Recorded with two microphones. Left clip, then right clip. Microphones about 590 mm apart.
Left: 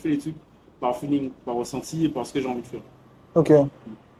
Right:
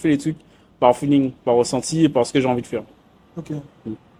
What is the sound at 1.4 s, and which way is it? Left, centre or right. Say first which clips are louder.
A man's voice: right 11 dB; right.